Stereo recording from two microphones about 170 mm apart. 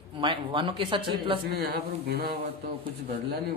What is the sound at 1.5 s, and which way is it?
Speech, 70° right (ahead or behind).